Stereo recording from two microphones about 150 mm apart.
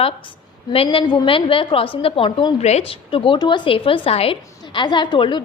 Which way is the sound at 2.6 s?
45° left (ahead or behind).